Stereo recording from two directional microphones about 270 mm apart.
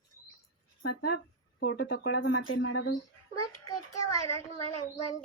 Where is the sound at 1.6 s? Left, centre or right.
Left.